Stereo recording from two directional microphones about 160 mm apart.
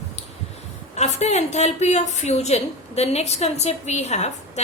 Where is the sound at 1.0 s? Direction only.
45° left (ahead or behind).